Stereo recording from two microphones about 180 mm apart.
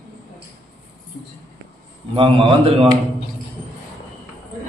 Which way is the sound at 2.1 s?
30° right (ahead or behind).